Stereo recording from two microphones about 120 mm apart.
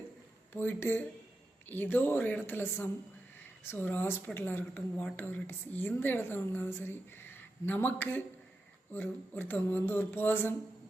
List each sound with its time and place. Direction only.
0.5 s a woman's voice: 15° left (ahead or behind)